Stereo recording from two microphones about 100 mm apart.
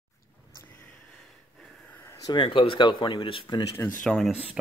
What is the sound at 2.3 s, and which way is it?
Speech, 65° left (ahead or behind).